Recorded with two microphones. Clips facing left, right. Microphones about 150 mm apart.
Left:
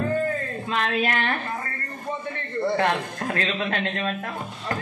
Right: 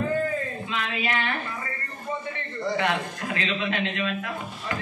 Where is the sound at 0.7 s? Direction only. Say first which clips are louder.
Left 5 dB; 50° left (ahead or behind).